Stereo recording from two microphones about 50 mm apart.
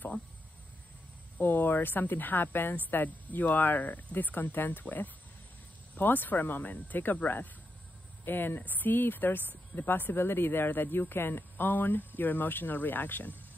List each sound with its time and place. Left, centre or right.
1.4 s speech: left